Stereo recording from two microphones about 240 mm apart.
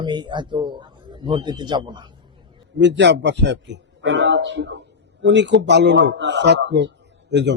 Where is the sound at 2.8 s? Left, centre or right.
Right.